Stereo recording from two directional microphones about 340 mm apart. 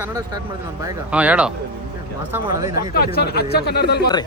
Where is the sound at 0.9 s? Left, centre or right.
Centre.